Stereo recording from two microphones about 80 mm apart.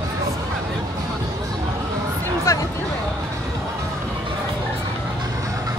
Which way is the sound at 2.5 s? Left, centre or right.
Left.